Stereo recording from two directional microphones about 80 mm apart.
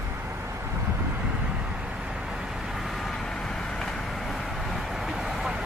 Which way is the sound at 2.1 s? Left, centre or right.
Centre.